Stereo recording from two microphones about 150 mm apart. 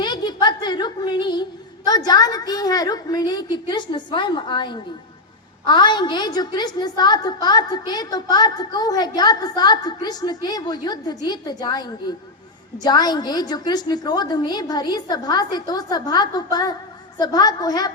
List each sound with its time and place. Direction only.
0.0 s a woman's voice: 30° left (ahead or behind)